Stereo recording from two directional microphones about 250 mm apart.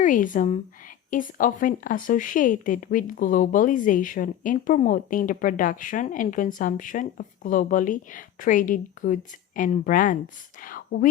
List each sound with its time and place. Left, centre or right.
0.0 s a woman's voice: left